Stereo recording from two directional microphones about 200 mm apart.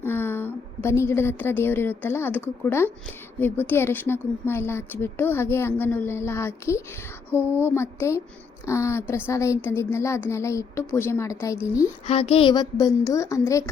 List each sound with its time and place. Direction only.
0.0 s a woman's voice: 10° left (ahead or behind)
7.3 s a sound: 10° right (ahead or behind)
7.6 s a woman's voice: 10° left (ahead or behind)
12.0 s speech: 30° left (ahead or behind)